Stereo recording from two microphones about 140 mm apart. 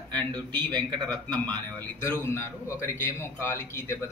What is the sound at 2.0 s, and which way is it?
A man's voice, 20° left (ahead or behind).